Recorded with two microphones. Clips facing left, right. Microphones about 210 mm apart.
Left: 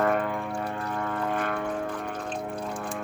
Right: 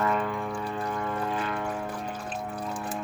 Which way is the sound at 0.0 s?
55° left (ahead or behind).